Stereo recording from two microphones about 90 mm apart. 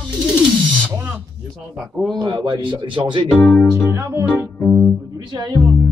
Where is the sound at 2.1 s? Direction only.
65° right (ahead or behind).